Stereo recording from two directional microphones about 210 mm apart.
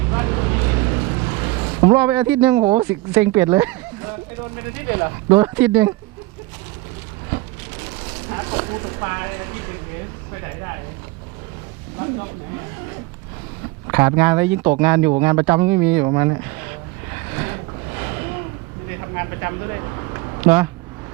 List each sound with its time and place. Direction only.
0.1 s vehicle: 20° right (ahead or behind)
2.0 s speech: 10° right (ahead or behind)
8.3 s speech: 20° right (ahead or behind)
13.8 s speech: 15° right (ahead or behind)
17.3 s a sound: 15° right (ahead or behind)
19.1 s speech: 15° right (ahead or behind)
20.4 s speech: 10° right (ahead or behind)